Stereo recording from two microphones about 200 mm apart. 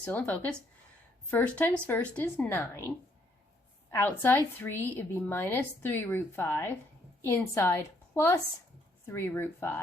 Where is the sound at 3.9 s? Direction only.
10° left (ahead or behind).